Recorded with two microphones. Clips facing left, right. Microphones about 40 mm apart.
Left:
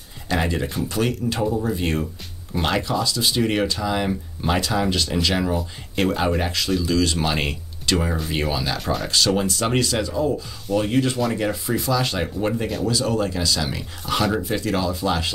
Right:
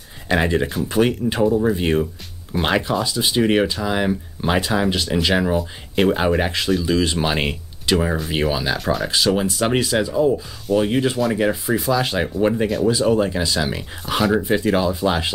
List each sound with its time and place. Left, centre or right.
0.3 s speech: right
8.7 s speech: centre
9.0 s speech: centre